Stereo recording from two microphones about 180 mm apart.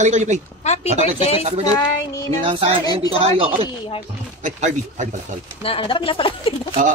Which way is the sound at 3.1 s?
30° right (ahead or behind).